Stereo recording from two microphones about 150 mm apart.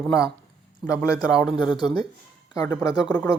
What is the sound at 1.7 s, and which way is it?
Speech, 30° left (ahead or behind).